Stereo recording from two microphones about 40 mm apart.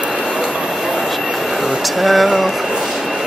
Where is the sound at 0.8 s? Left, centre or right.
Centre.